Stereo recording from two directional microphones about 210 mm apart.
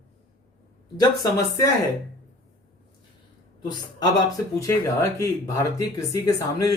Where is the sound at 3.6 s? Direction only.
20° left (ahead or behind).